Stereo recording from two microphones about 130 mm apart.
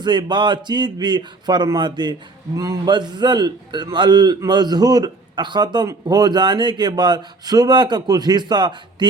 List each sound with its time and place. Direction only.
0.0 s a man's voice: 35° right (ahead or behind)